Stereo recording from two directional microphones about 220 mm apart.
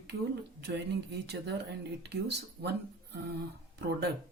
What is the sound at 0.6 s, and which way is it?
Speech, 50° right (ahead or behind).